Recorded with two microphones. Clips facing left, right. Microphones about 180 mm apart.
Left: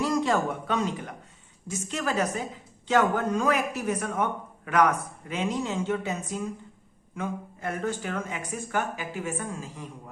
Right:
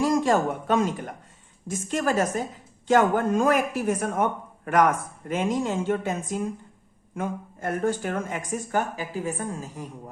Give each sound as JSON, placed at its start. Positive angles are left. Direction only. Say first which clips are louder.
{"t": 0.0, "sound": "a woman's voice", "louder": "right 3 dB", "side_deg": -45}